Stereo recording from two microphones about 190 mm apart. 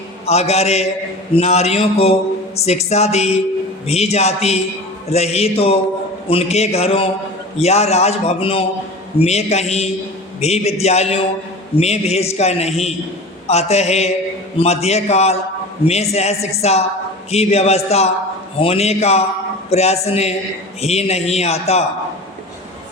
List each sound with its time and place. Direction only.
0.3 s a man's voice: 35° left (ahead or behind)